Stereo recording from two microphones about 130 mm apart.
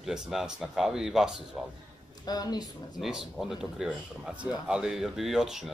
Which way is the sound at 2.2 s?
30° left (ahead or behind).